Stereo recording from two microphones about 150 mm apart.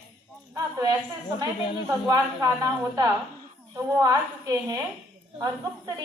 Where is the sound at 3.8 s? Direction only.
20° right (ahead or behind).